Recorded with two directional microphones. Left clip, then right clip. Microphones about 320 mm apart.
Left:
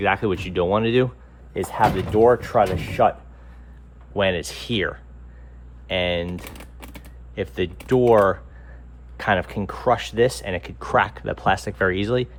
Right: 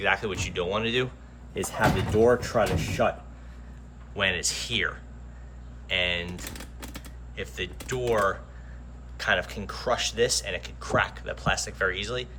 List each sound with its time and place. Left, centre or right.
0.0 s speech: centre
2.1 s speech: centre
4.2 s speech: centre
7.3 s speech: centre